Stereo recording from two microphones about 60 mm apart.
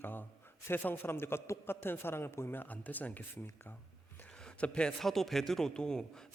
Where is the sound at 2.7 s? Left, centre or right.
Left.